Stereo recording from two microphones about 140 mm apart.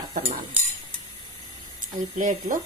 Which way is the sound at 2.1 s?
65° right (ahead or behind).